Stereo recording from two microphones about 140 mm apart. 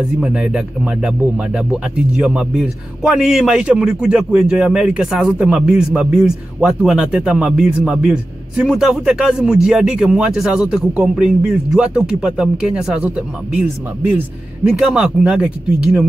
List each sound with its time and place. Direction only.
0.2 s speech: 5° right (ahead or behind)
14.7 s speech: 5° right (ahead or behind)